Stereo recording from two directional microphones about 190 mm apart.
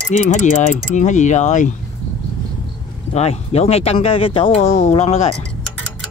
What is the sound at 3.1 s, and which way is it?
Speech, 35° left (ahead or behind).